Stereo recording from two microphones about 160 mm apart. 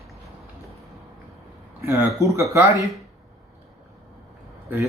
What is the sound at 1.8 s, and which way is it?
Speech, 20° right (ahead or behind).